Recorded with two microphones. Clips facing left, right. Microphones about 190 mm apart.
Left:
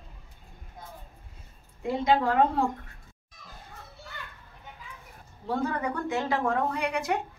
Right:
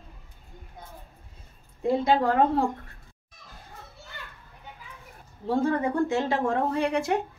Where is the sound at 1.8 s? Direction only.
35° right (ahead or behind).